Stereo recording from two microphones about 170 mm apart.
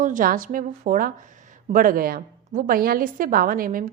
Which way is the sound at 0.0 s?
50° right (ahead or behind).